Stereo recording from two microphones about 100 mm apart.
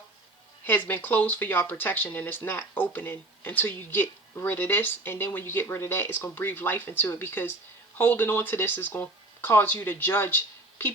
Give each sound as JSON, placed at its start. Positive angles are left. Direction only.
{"t": 0.6, "sound": "speech", "side_deg": 20}